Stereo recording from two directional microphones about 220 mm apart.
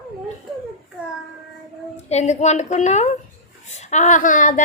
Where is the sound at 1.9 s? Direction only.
30° left (ahead or behind).